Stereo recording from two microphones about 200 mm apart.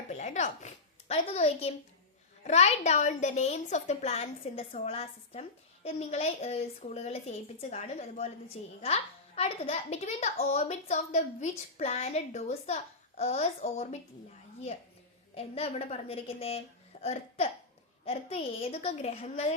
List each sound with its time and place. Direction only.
0.1 s a woman's voice: 35° left (ahead or behind)
15.4 s a woman's voice: 30° left (ahead or behind)